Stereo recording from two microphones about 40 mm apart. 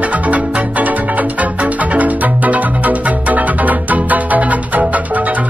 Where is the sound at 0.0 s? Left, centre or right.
Right.